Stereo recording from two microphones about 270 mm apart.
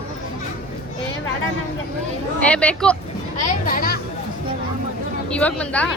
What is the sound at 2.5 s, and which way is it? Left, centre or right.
Speech, centre.